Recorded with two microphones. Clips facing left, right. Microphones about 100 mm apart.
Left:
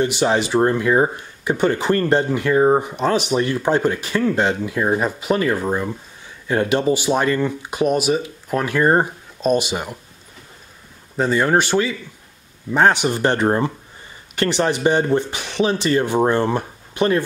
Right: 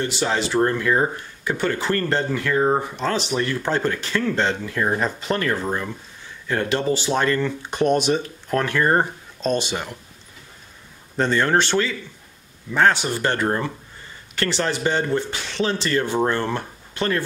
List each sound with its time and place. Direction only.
0.0 s speech: 15° left (ahead or behind)
11.1 s speech: 10° left (ahead or behind)